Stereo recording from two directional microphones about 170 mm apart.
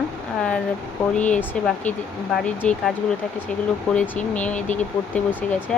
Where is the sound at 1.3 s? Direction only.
10° left (ahead or behind).